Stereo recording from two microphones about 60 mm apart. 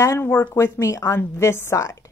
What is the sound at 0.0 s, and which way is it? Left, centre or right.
A woman's voice, left.